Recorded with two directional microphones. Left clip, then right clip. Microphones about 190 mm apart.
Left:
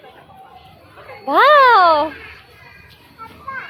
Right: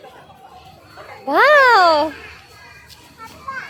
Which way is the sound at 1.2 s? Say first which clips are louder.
Left 1 dB; 20° right (ahead or behind).